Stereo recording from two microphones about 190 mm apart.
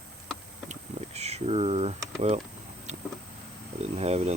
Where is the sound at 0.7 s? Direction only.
35° right (ahead or behind).